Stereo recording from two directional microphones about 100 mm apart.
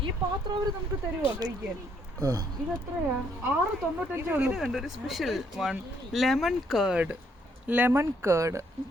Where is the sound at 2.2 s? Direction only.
30° right (ahead or behind).